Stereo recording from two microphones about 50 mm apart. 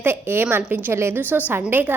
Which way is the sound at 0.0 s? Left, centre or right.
Right.